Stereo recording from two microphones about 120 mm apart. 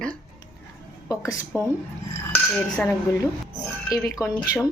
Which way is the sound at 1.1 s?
25° left (ahead or behind).